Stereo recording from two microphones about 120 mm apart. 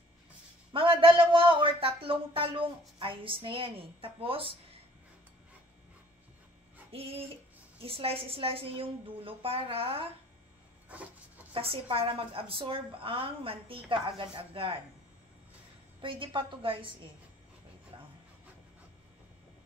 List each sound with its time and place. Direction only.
0.7 s a sound: 45° right (ahead or behind)
3.0 s a woman's voice: 45° right (ahead or behind)
6.9 s a woman's voice: 55° right (ahead or behind)
10.9 s rub: 10° right (ahead or behind)
11.5 s a woman's voice: 50° right (ahead or behind)
16.0 s a woman's voice: 45° right (ahead or behind)
17.9 s a sound: 45° right (ahead or behind)